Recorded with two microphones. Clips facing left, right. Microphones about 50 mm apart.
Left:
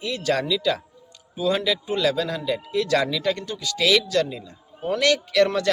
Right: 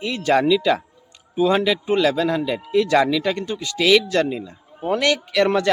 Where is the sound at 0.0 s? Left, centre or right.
Right.